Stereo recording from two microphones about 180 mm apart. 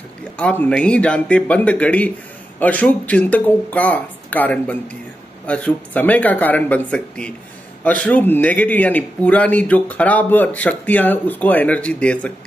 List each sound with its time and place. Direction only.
0.2 s a man's voice: 5° left (ahead or behind)